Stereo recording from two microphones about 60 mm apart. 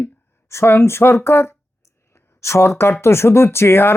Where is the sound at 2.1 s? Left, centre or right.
Left.